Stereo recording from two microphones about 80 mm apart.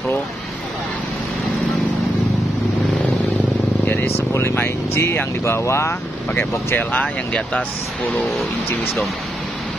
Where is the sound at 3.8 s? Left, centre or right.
Left.